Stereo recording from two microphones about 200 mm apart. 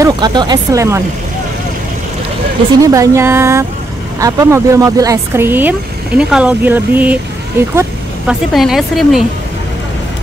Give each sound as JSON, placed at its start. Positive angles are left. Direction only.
{"t": 0.0, "sound": "speech", "side_deg": -20}
{"t": 2.8, "sound": "speech", "side_deg": -15}
{"t": 8.3, "sound": "a woman's voice", "side_deg": 0}